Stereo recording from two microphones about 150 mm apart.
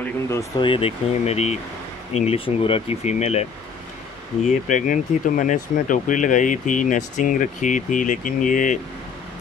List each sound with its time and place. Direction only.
0.0 s speech: 20° left (ahead or behind)
0.6 s speech: 35° left (ahead or behind); by 8.7 s 55° left (ahead or behind)